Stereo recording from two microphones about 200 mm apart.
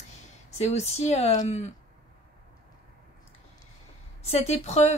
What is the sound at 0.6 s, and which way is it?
Speech, 35° left (ahead or behind).